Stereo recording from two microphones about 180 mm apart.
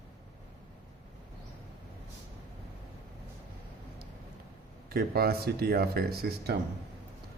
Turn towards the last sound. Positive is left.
turn(degrees=-65)  # may be behind; listen again after turning